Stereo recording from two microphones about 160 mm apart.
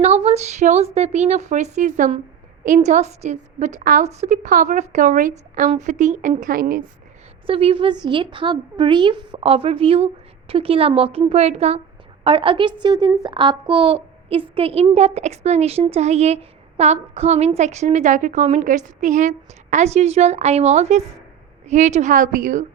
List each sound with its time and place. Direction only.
0.0 s a child's voice: 40° right (ahead or behind); by 4.0 s 60° right (ahead or behind)
4.0 s a child's voice: 45° right (ahead or behind)
6.4 s a woman's voice: 65° right (ahead or behind)
7.4 s a child's voice: 35° right (ahead or behind); by 22.6 s 55° right (ahead or behind)